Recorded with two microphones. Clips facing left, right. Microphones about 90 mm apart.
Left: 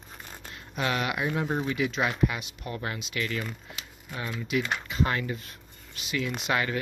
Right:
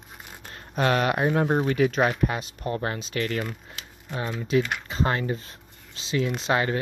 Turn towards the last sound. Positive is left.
turn(degrees=-30)  # may be behind; listen again after turning